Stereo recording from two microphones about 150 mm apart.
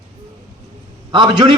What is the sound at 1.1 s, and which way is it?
Speech, 30° right (ahead or behind).